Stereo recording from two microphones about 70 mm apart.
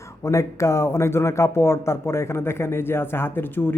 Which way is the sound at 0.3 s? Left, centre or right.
Left.